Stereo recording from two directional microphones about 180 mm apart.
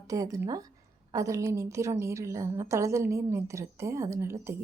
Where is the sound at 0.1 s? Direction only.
20° right (ahead or behind).